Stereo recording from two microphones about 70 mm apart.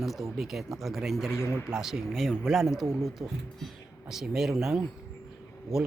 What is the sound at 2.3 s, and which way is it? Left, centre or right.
Vehicle, centre.